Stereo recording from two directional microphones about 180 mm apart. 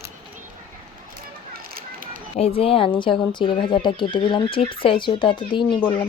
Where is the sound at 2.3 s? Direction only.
35° left (ahead or behind).